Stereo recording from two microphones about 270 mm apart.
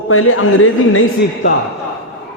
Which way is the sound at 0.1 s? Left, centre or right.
Left.